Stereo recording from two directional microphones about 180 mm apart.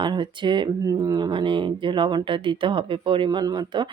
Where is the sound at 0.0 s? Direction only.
25° right (ahead or behind).